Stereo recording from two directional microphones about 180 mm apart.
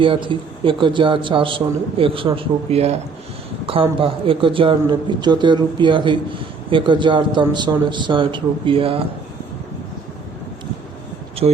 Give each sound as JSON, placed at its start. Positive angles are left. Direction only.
{"t": 0.0, "sound": "a man's voice", "side_deg": -30}